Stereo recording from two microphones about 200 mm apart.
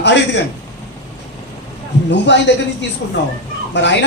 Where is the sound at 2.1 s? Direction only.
60° left (ahead or behind).